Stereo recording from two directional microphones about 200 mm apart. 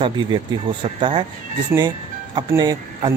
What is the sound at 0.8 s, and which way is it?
Speech, 25° right (ahead or behind).